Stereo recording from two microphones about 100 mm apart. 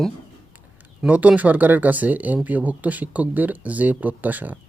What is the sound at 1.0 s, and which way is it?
Speech, 15° right (ahead or behind).